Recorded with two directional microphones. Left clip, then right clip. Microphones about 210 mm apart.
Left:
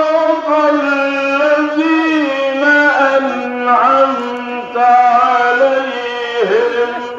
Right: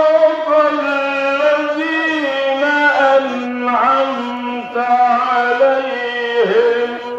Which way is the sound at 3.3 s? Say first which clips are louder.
Left 5 dB; 20° right (ahead or behind).